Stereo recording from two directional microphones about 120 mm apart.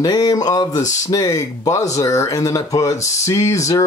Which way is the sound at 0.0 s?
30° left (ahead or behind).